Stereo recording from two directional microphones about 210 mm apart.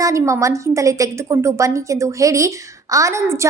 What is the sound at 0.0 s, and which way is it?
A woman's voice, 15° right (ahead or behind).